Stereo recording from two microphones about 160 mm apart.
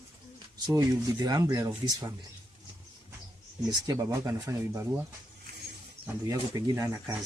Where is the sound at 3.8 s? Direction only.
20° right (ahead or behind).